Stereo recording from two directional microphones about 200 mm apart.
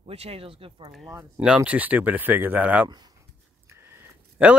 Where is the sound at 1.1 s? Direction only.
10° right (ahead or behind).